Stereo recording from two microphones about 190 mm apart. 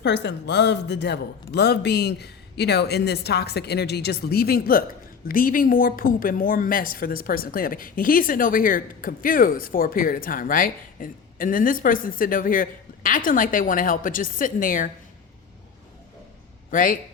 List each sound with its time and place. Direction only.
0.0 s a man's voice: 65° left (ahead or behind); by 14.8 s 45° left (ahead or behind)
16.7 s a woman's voice: 45° left (ahead or behind)